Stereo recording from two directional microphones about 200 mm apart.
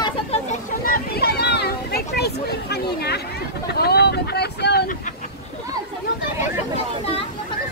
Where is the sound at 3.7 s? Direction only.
55° left (ahead or behind).